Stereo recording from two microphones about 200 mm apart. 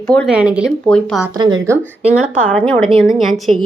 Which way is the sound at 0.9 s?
5° left (ahead or behind).